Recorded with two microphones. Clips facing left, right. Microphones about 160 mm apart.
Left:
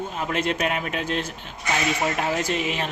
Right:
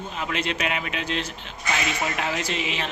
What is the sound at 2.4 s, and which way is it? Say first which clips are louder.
Speech: left 3 dB; 50° left (ahead or behind).